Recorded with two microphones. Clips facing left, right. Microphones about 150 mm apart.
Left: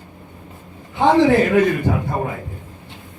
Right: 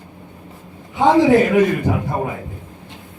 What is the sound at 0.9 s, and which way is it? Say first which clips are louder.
A man's voice: right 1 dB; 15° right (ahead or behind).